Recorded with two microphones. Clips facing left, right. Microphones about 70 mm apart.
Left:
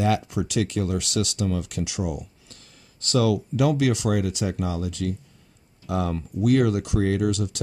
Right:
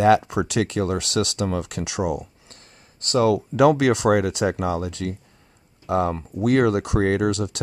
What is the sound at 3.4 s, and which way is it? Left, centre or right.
Speech, right.